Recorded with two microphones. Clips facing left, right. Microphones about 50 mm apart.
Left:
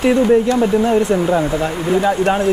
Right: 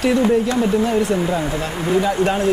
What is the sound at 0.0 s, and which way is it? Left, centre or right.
Speech, left.